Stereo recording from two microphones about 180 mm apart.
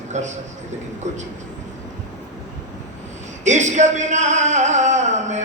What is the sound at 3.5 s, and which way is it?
A man's voice, 40° right (ahead or behind).